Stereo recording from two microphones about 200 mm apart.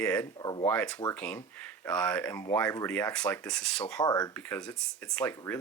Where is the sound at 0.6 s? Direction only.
5° left (ahead or behind).